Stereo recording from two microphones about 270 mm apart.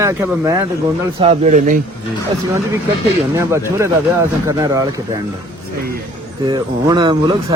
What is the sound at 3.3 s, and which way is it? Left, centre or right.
Speech, centre.